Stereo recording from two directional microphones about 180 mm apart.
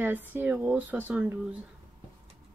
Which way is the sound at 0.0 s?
10° right (ahead or behind).